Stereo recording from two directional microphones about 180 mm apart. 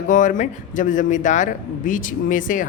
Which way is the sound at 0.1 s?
45° left (ahead or behind).